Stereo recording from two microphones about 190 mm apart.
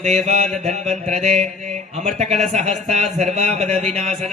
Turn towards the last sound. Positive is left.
turn(degrees=-35)  # may be behind; listen again after turning